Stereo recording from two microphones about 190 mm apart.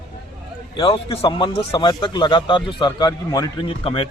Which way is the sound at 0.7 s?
30° left (ahead or behind).